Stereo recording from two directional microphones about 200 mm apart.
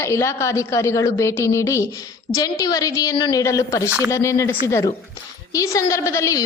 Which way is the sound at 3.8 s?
10° right (ahead or behind).